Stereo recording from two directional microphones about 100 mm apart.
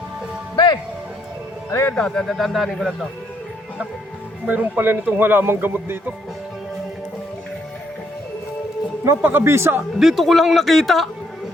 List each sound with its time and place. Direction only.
0.5 s music: 50° left (ahead or behind)
1.7 s speech: 25° left (ahead or behind)
2.0 s a man's voice: 5° left (ahead or behind)
4.4 s speech: 15° right (ahead or behind)
9.0 s speech: 20° right (ahead or behind)
10.0 s a man's voice: centre (ahead or behind)